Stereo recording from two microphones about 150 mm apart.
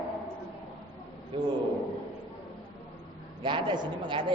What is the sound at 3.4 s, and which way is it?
Speech, 30° right (ahead or behind).